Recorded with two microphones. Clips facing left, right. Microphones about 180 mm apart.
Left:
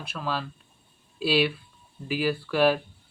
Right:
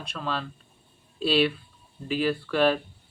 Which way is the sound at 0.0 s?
5° left (ahead or behind).